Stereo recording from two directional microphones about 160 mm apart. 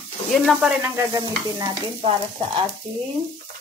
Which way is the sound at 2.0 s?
35° right (ahead or behind).